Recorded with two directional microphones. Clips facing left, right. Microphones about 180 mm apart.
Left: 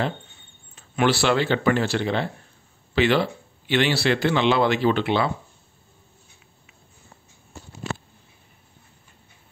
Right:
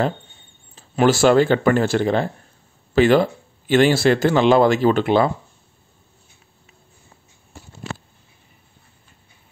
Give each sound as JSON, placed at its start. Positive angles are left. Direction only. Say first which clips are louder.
{"t": 0.7, "sound": "a man's voice", "louder": "right 5 dB", "side_deg": -40}